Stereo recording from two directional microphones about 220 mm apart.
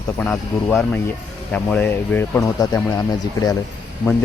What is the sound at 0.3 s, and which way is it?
Speech, 10° left (ahead or behind).